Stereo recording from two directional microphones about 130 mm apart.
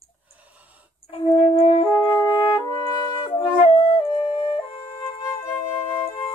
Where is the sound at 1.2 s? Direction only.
45° left (ahead or behind).